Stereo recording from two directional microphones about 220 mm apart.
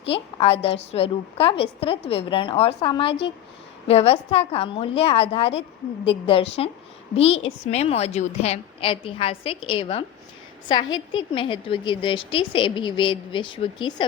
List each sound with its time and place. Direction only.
0.0 s a woman's voice: 25° left (ahead or behind)
11.1 s a woman's voice: 20° left (ahead or behind)